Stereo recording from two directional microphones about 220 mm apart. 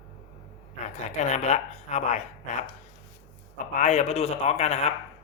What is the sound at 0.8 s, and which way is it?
Speech, 30° left (ahead or behind).